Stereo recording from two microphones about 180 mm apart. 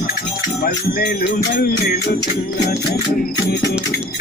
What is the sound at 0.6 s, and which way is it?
Music, 60° left (ahead or behind).